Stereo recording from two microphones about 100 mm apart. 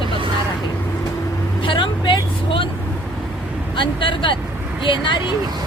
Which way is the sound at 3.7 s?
55° left (ahead or behind).